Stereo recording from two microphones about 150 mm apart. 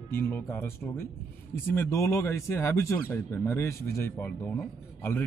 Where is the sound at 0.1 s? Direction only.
15° left (ahead or behind).